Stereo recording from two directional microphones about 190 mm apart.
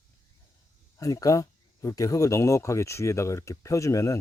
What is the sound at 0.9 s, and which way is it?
Speech, 20° left (ahead or behind).